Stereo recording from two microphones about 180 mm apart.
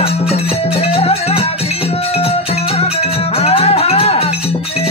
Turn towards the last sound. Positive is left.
turn(degrees=35)  # may be behind; listen again after turning